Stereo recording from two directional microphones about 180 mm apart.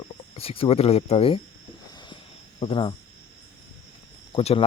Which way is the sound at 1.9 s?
25° left (ahead or behind).